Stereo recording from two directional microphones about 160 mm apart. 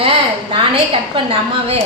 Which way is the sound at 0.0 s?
35° right (ahead or behind).